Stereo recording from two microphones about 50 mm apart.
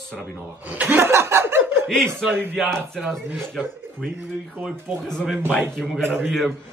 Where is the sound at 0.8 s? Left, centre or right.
Right.